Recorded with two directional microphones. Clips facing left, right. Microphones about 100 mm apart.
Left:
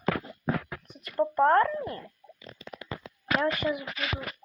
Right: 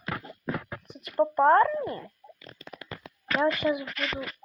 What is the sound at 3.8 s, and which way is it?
Speech, 10° left (ahead or behind).